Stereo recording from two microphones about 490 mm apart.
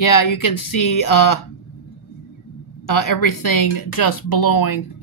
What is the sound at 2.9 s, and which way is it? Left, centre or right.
A woman's voice, left.